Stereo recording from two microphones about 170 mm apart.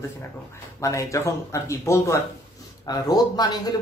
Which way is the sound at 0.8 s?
20° left (ahead or behind).